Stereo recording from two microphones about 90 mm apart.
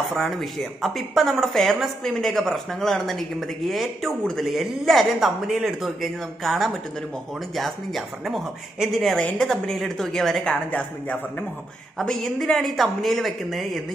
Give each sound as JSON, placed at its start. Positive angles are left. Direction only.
{"t": 0.1, "sound": "a woman's voice", "side_deg": 5}
{"t": 10.7, "sound": "speech", "side_deg": 15}
{"t": 12.0, "sound": "a woman's voice", "side_deg": 5}